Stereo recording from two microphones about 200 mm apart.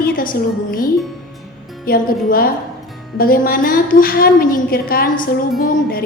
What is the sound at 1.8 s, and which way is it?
A woman's voice, 45° left (ahead or behind).